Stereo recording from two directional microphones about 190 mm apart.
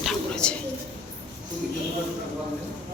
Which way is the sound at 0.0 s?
Centre (ahead or behind).